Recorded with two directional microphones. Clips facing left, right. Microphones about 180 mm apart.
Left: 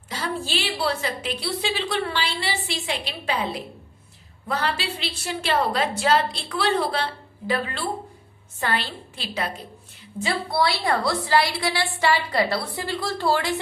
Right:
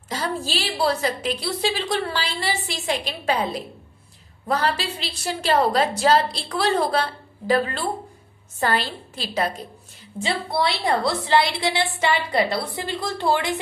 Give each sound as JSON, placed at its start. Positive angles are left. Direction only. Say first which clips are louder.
{"t": 0.1, "sound": "a woman's voice", "louder": "right 2 dB", "side_deg": -40}
{"t": 10.2, "sound": "a woman's voice", "louder": "even", "side_deg": -25}